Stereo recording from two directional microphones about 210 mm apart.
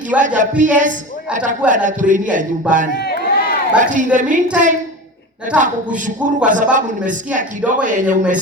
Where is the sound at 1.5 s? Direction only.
40° right (ahead or behind).